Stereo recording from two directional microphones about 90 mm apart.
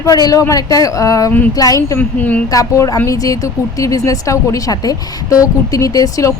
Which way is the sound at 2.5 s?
40° left (ahead or behind).